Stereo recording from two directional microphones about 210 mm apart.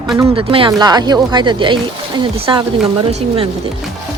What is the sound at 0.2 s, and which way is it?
Speech, 25° right (ahead or behind).